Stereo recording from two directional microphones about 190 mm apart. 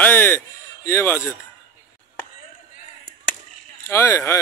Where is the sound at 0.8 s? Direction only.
10° left (ahead or behind).